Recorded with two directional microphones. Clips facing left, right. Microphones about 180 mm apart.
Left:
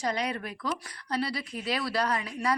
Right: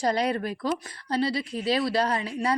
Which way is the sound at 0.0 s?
35° right (ahead or behind).